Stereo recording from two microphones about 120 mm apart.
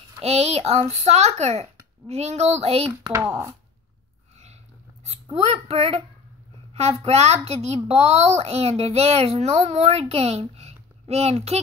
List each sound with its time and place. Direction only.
0.2 s a child's voice: 60° right (ahead or behind)
3.1 s speech: 25° right (ahead or behind)
5.3 s a child's voice: 60° right (ahead or behind)